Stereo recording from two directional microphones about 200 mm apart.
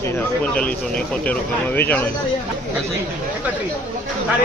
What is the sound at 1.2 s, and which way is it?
Speech, 10° left (ahead or behind).